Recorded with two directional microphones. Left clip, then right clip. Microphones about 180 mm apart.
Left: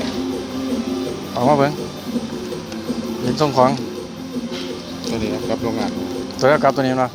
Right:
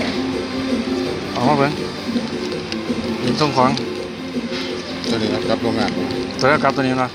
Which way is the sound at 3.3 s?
15° left (ahead or behind).